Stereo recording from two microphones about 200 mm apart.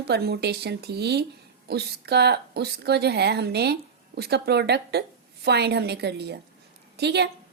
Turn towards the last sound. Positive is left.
turn(degrees=-55)  # may be behind; listen again after turning